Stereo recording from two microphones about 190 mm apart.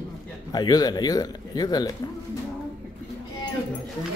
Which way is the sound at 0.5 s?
20° left (ahead or behind).